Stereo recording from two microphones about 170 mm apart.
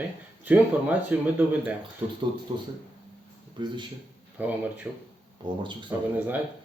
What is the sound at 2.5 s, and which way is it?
Speech, 25° right (ahead or behind).